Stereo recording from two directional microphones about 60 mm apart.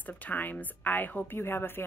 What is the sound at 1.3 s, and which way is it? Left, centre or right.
Speech, left.